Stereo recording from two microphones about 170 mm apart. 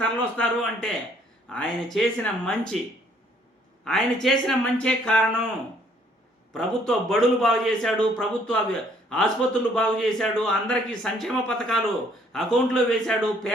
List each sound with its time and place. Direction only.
0.0 s a man's voice: 5° left (ahead or behind)
3.8 s a man's voice: centre (ahead or behind)
6.5 s a man's voice: centre (ahead or behind)